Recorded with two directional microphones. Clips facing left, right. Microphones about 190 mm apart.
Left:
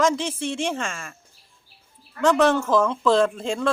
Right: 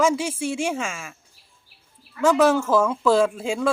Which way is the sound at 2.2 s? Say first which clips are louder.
Right 1 dB; 5° right (ahead or behind).